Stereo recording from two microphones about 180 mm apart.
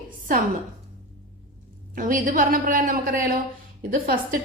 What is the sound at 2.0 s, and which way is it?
A woman's voice, 50° right (ahead or behind).